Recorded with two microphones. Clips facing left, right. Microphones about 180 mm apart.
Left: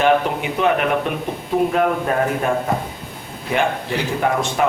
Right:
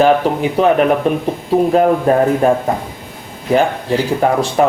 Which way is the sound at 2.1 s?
35° right (ahead or behind).